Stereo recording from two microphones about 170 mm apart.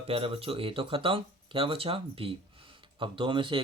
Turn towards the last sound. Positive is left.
turn(degrees=-30)  # may be behind; listen again after turning